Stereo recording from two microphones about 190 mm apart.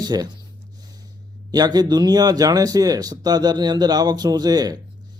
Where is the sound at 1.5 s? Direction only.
20° right (ahead or behind).